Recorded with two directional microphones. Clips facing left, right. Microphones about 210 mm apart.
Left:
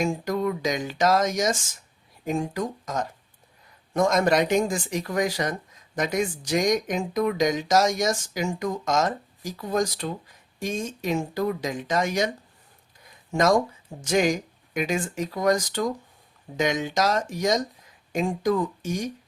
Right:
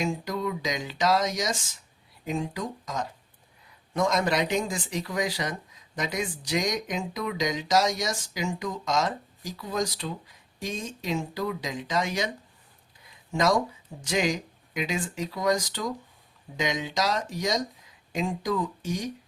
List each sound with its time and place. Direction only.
0.0 s speech: 50° left (ahead or behind)
14.0 s speech: 50° left (ahead or behind)